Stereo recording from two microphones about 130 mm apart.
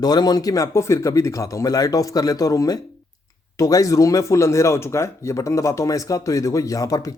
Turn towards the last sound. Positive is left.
turn(degrees=25)  # may be behind; listen again after turning